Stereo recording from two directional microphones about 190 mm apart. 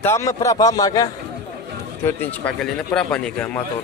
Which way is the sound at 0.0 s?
15° left (ahead or behind).